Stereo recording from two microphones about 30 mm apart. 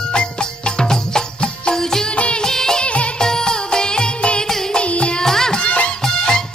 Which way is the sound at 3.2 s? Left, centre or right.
Left.